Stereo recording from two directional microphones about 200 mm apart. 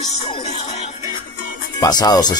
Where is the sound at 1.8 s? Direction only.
20° left (ahead or behind).